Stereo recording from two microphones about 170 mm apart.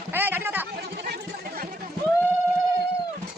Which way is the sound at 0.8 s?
70° right (ahead or behind).